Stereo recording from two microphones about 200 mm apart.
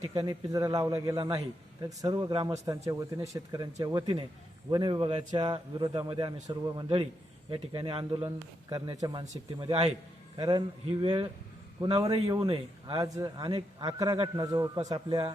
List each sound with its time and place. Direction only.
0.1 s a man's voice: 15° right (ahead or behind)